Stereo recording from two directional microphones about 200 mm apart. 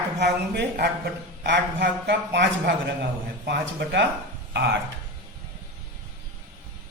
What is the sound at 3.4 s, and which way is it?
Speech, 65° right (ahead or behind).